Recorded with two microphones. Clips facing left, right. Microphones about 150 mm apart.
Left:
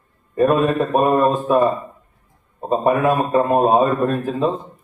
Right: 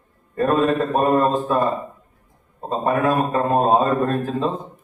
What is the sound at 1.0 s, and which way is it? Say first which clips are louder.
Speech: left 3 dB; 15° left (ahead or behind).